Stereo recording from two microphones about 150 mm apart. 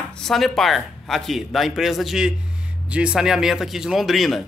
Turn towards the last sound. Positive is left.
turn(degrees=0)  # may be behind; listen again after turning